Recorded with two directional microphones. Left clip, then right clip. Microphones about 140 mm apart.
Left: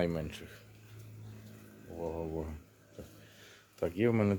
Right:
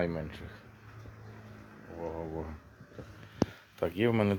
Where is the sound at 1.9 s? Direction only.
25° left (ahead or behind).